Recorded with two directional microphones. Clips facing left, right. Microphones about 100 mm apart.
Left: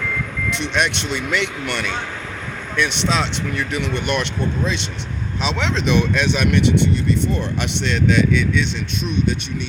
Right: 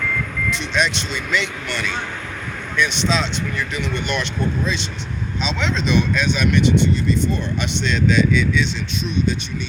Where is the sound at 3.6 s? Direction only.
65° left (ahead or behind).